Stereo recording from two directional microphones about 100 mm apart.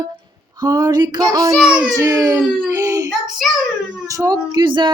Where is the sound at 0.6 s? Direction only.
40° right (ahead or behind).